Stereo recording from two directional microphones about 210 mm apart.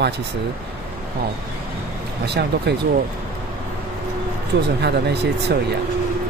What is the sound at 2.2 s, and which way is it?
Speech, 50° right (ahead or behind).